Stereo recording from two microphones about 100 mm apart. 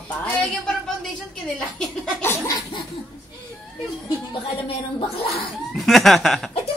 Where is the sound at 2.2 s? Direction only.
25° left (ahead or behind).